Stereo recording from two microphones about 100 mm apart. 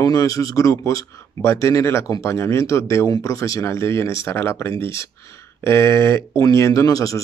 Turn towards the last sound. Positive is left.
turn(degrees=35)  # may be behind; listen again after turning